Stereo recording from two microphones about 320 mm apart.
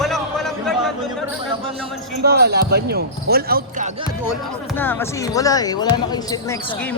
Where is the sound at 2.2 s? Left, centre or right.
Right.